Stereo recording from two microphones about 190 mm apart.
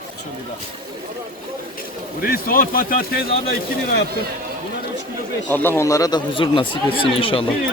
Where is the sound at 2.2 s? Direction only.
50° left (ahead or behind).